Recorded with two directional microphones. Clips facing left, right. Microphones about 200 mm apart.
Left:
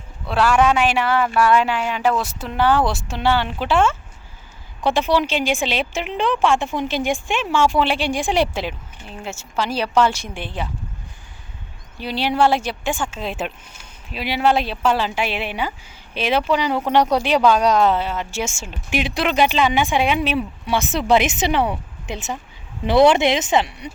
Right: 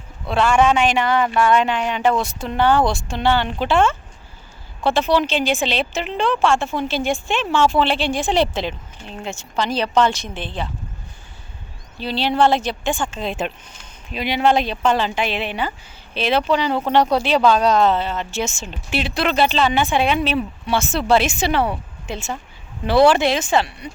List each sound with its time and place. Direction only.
0.3 s speech: 5° left (ahead or behind)
11.9 s speech: 15° left (ahead or behind)